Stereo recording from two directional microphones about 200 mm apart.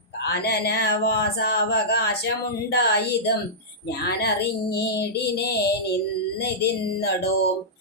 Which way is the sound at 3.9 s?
55° left (ahead or behind).